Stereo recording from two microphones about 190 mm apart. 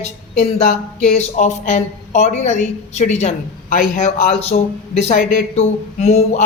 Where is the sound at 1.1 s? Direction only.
35° left (ahead or behind).